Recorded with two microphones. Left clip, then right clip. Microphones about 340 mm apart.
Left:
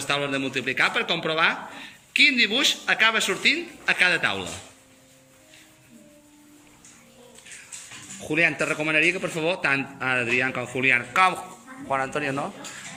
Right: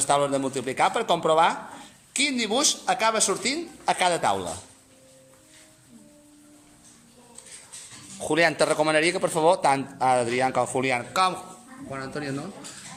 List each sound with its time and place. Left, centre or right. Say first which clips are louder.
0.1 s a man's voice: right 2 dB; centre
8.3 s a man's voice: right 1 dB; right
10.2 s speech: left 1 dB; right
10.4 s a man's voice: even; centre
11.9 s speech: left 8 dB; centre